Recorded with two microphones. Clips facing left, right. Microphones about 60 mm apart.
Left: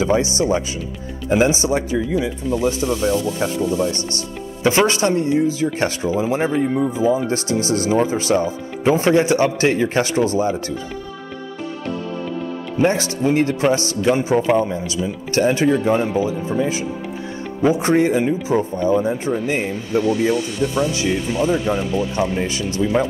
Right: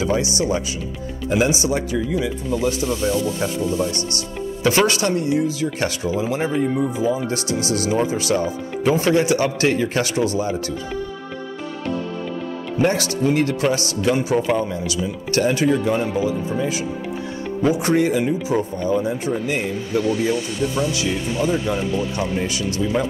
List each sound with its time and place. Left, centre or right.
0.0 s speech: left
12.8 s speech: left